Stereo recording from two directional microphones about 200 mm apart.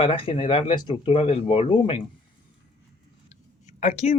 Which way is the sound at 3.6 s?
35° left (ahead or behind).